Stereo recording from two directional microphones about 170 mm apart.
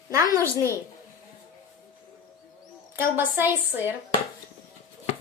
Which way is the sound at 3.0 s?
15° right (ahead or behind).